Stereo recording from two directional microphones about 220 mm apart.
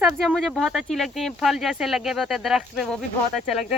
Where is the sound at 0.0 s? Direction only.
Centre (ahead or behind).